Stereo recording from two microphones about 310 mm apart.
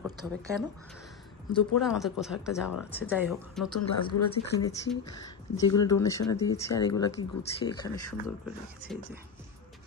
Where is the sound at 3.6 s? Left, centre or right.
Left.